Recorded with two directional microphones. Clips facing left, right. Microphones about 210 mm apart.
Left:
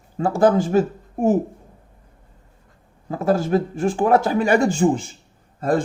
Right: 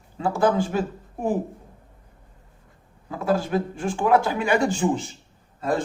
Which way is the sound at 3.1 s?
45° left (ahead or behind).